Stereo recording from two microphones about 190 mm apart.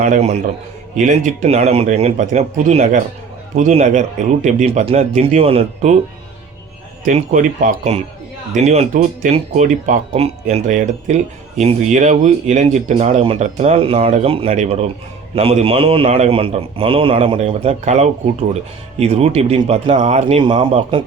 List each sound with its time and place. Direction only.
0.0 s speech: 35° right (ahead or behind)
7.0 s a man's voice: 40° right (ahead or behind); by 21.0 s 25° right (ahead or behind)